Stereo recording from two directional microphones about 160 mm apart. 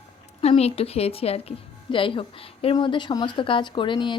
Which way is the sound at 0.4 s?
40° left (ahead or behind).